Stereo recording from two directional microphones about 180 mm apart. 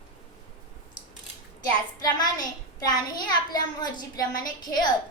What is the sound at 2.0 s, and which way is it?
A child's voice, 20° left (ahead or behind).